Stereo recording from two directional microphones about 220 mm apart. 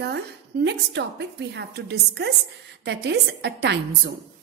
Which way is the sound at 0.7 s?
50° right (ahead or behind).